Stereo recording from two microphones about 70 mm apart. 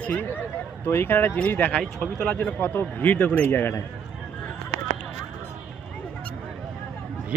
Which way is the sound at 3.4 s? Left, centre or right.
Left.